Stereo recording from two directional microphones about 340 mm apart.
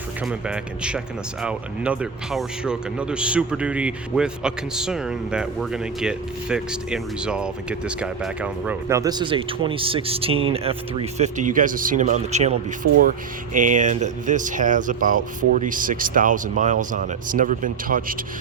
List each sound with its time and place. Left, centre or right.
0.3 s speech: centre; by 18.0 s right